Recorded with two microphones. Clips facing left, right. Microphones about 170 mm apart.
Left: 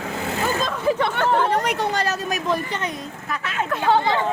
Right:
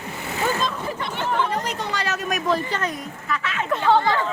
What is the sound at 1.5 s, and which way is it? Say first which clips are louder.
Chatter: left 5 dB; 65° left (ahead or behind).